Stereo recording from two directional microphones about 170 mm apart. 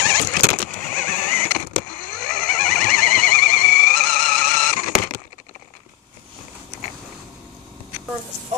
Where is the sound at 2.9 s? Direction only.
50° left (ahead or behind).